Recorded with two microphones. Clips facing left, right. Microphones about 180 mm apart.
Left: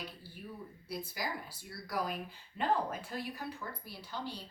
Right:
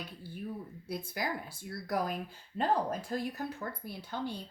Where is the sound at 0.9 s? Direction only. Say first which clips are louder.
Right 3 dB; 55° right (ahead or behind).